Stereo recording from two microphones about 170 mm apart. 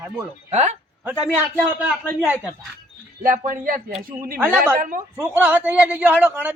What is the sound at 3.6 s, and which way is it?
Speech, 55° right (ahead or behind).